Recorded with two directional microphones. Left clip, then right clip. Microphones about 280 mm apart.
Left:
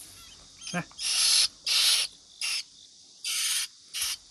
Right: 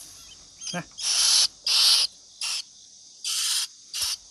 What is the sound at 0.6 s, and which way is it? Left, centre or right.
Owl, centre.